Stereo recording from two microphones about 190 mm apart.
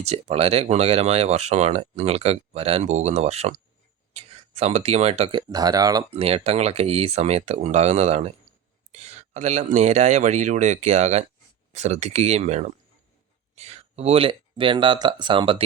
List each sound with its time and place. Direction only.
0.0 s speech: 35° right (ahead or behind)
5.5 s speech: 20° right (ahead or behind)
6.1 s speech: 30° right (ahead or behind)